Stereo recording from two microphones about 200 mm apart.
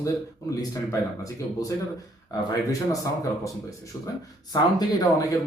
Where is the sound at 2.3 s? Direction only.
15° left (ahead or behind).